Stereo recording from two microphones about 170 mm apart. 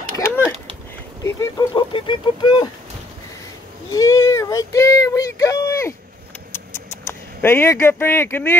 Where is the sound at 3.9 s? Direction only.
20° left (ahead or behind).